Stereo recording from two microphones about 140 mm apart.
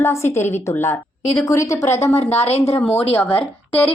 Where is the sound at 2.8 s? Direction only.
10° left (ahead or behind).